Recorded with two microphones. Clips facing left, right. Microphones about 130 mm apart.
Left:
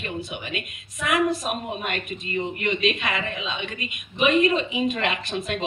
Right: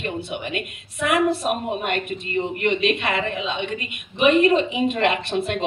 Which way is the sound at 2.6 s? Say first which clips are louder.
Right 4 dB; 60° right (ahead or behind).